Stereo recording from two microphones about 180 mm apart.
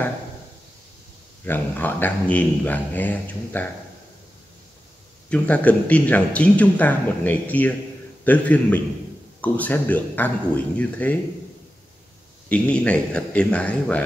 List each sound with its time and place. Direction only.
1.4 s a man's voice: 10° left (ahead or behind)
5.3 s a man's voice: 5° left (ahead or behind)
12.4 s a man's voice: 5° left (ahead or behind)